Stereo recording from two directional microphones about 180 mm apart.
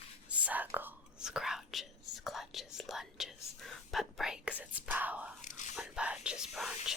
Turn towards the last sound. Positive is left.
turn(degrees=0)  # may be behind; listen again after turning